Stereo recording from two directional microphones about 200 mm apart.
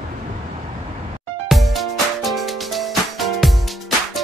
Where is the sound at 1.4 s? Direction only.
Centre (ahead or behind).